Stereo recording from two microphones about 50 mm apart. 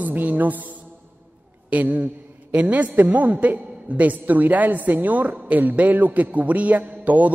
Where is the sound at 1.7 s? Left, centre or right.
Right.